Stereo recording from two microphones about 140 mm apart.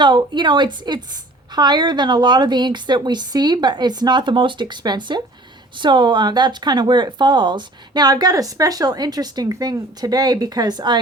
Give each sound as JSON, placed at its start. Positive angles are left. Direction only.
{"t": 0.0, "sound": "a woman's voice", "side_deg": -30}